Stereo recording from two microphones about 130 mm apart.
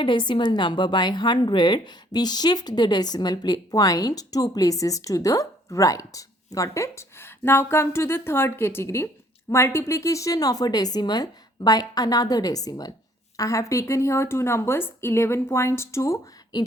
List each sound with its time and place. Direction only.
0.0 s a woman's voice: 35° left (ahead or behind)